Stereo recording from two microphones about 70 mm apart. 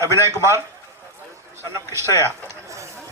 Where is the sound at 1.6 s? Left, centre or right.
Right.